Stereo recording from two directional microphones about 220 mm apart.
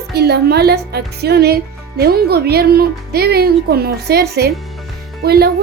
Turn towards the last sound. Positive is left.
turn(degrees=-45)  # may be behind; listen again after turning